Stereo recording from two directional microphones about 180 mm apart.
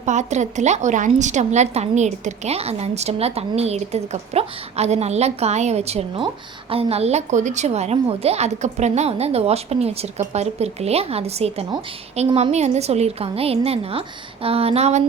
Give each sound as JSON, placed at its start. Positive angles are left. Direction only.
{"t": 0.0, "sound": "a woman's voice", "side_deg": -40}